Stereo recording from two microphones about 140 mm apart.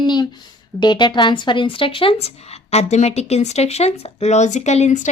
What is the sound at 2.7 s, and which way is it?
Speech, 50° left (ahead or behind).